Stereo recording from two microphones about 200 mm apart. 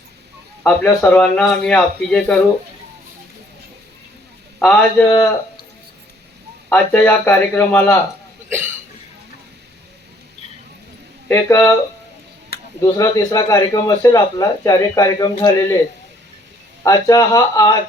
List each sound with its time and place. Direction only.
0.6 s speech: 5° left (ahead or behind)
5.0 s speech: 20° left (ahead or behind)
6.7 s a man's voice: 10° left (ahead or behind)
8.4 s cough: 10° right (ahead or behind)
11.3 s a man's voice: 15° left (ahead or behind)
12.8 s a man's voice: 15° left (ahead or behind)
16.8 s a man's voice: 15° left (ahead or behind)